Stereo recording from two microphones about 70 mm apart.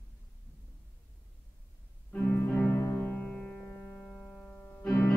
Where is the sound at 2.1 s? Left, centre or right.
Left.